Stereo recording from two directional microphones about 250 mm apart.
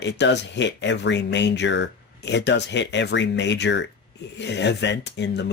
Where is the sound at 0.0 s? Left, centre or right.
Left.